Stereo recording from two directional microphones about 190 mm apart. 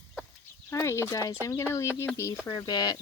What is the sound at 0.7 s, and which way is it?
Speech, 15° left (ahead or behind).